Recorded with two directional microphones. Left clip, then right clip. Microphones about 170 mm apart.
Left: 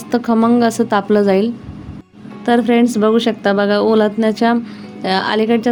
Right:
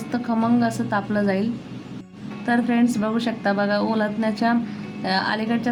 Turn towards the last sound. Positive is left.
turn(degrees=40)  # may be behind; listen again after turning